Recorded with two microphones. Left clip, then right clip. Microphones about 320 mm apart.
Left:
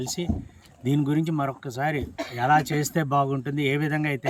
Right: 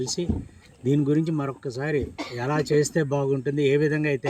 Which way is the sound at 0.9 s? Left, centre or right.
Centre.